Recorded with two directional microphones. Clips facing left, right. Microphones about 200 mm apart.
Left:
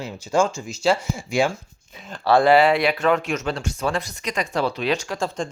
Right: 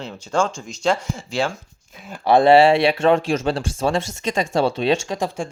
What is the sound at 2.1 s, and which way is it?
Speech, 20° right (ahead or behind).